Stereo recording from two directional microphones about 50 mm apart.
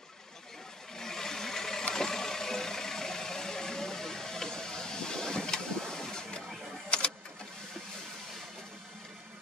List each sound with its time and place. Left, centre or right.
0.9 s vehicle: centre